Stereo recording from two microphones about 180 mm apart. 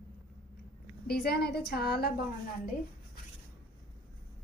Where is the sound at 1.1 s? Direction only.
65° left (ahead or behind).